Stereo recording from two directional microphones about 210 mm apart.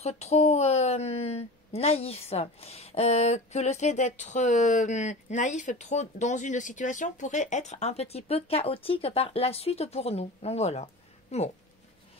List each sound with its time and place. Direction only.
0.0 s a woman's voice: 30° left (ahead or behind)